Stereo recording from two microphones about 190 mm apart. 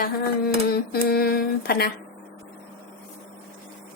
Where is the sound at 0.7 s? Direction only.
55° left (ahead or behind).